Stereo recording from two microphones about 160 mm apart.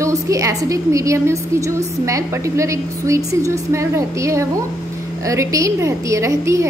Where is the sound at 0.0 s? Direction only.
20° right (ahead or behind).